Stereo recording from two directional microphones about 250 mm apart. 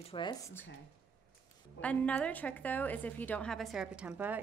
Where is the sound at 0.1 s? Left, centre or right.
Centre.